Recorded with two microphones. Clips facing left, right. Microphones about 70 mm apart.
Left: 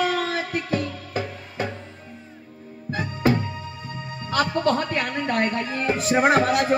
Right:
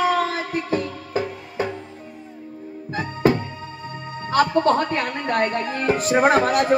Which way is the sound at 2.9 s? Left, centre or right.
Right.